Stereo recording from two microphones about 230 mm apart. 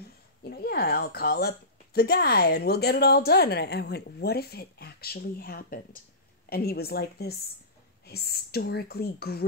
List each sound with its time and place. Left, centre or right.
0.4 s a woman's voice: left